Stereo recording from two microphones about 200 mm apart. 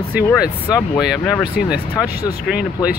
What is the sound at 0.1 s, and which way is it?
Speech, 10° right (ahead or behind).